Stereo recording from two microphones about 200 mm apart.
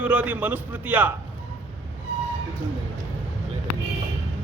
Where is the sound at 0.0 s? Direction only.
5° right (ahead or behind).